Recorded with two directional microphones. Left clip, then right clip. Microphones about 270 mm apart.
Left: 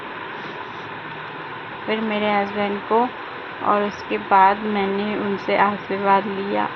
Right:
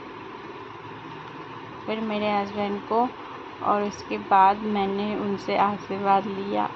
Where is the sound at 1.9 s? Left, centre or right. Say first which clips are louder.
Left 5 dB; centre.